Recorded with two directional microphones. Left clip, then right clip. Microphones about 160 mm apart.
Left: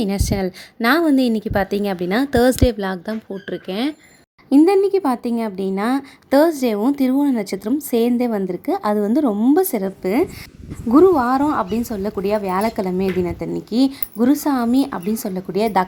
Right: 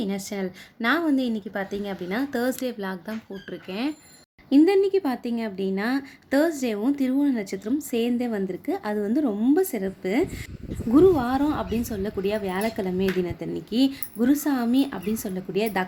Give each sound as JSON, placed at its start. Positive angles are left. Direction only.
{"t": 0.0, "sound": "a woman's voice", "side_deg": 45}
{"t": 4.4, "sound": "a woman's voice", "side_deg": 30}